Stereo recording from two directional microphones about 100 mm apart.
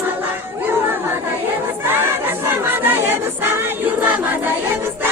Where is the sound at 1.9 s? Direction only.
20° right (ahead or behind).